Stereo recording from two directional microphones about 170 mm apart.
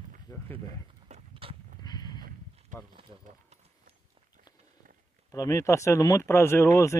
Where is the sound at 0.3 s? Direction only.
20° left (ahead or behind).